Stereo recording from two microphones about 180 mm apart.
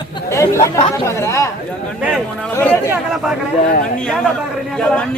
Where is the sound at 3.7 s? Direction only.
45° left (ahead or behind).